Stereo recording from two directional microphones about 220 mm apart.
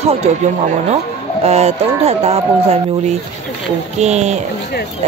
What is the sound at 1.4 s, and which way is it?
Speech, 30° right (ahead or behind).